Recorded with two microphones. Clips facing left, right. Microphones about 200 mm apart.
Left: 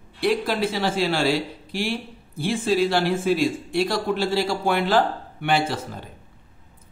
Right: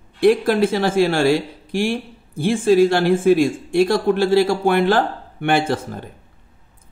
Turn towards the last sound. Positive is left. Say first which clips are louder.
# right 4 dB
turn(degrees=-50)  # may be behind; listen again after turning